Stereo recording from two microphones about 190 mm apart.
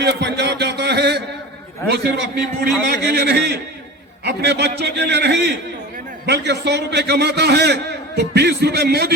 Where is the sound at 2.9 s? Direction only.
60° right (ahead or behind).